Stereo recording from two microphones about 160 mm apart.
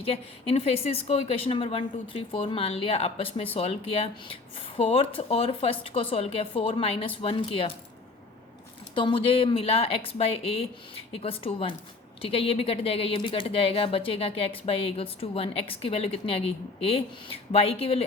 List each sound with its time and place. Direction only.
0.0 s a woman's voice: 40° left (ahead or behind)
9.0 s a woman's voice: 35° left (ahead or behind)